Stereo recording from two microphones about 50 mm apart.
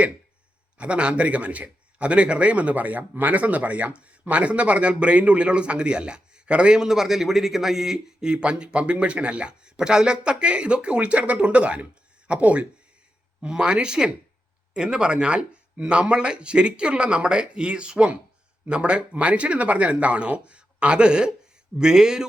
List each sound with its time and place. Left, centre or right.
0.8 s a man's voice: right
13.5 s a man's voice: centre